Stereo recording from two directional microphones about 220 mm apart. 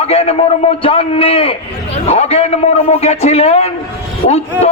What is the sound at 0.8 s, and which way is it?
A man's voice, 25° left (ahead or behind).